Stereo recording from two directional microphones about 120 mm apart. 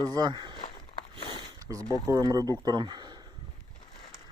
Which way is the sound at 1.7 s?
30° right (ahead or behind).